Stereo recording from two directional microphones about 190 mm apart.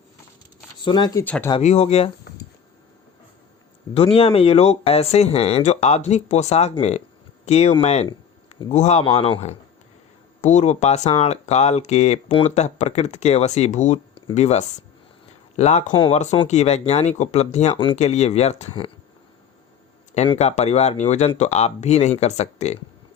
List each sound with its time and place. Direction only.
0.8 s speech: 25° left (ahead or behind)
1.2 s speech: 10° left (ahead or behind)
1.6 s speech: 35° left (ahead or behind)
3.9 s speech: 30° left (ahead or behind)
20.1 s speech: 30° left (ahead or behind)